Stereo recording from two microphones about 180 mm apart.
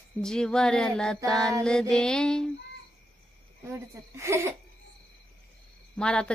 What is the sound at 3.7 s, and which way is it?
Speech, 15° right (ahead or behind).